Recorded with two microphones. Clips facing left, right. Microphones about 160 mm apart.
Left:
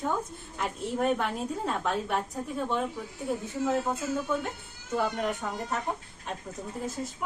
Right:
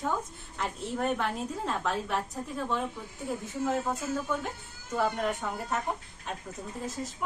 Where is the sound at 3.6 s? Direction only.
5° left (ahead or behind).